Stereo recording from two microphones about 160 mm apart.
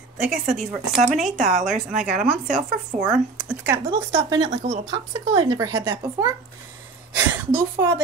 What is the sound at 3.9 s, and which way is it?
Speech, 35° right (ahead or behind).